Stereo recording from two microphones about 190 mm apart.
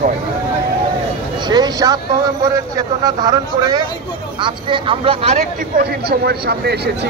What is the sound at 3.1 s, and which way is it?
Speech, 20° right (ahead or behind).